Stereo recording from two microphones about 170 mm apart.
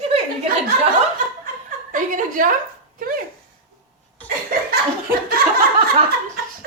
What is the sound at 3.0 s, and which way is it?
Dog, 55° right (ahead or behind).